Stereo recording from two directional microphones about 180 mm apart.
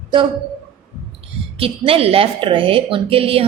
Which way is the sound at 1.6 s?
30° right (ahead or behind).